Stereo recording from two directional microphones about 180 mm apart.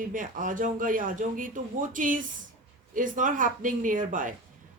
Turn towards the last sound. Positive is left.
turn(degrees=-45)  # may be behind; listen again after turning